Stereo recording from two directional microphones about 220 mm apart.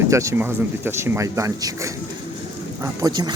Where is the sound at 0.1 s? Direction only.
15° right (ahead or behind).